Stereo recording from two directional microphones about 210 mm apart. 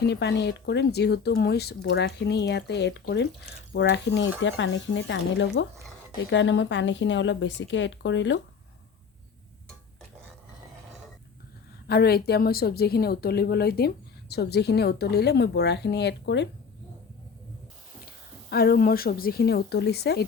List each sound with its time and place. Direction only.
0.0 s a woman's voice: 55° left (ahead or behind)
11.9 s a woman's voice: 50° left (ahead or behind)
18.5 s a woman's voice: 50° left (ahead or behind)